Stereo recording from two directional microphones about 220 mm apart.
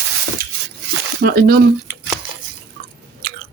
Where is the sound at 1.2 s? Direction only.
40° right (ahead or behind).